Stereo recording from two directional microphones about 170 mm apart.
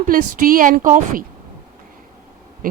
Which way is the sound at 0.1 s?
55° right (ahead or behind).